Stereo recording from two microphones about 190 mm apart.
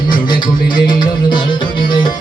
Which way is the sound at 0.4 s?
45° left (ahead or behind).